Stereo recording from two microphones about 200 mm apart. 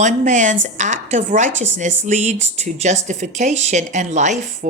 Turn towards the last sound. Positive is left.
turn(degrees=-35)  # may be behind; listen again after turning